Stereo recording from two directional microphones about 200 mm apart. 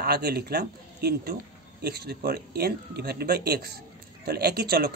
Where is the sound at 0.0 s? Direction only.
50° right (ahead or behind).